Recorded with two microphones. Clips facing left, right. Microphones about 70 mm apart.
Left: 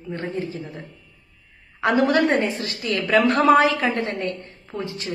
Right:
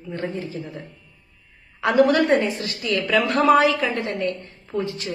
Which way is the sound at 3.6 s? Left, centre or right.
Left.